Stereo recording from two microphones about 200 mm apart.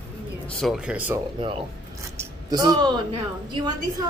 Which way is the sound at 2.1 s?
20° right (ahead or behind).